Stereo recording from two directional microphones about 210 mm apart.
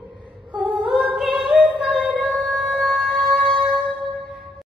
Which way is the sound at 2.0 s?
5° left (ahead or behind).